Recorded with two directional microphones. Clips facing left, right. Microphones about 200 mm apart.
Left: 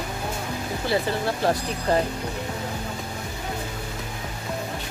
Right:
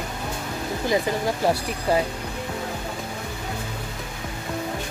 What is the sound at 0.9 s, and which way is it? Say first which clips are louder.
Speech: right 1 dB; 10° right (ahead or behind).